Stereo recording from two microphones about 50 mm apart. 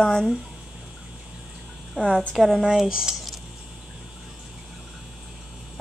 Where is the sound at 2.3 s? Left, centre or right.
Centre.